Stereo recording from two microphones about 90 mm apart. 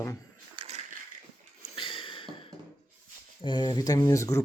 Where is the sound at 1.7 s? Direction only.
70° left (ahead or behind).